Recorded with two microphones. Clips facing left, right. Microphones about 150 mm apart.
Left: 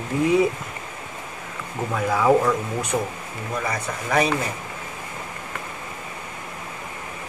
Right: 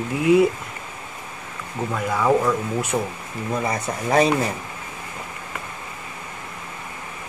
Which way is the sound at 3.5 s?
25° right (ahead or behind).